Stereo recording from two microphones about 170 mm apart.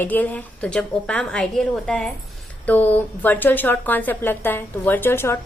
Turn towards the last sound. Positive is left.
turn(degrees=15)  # may be behind; listen again after turning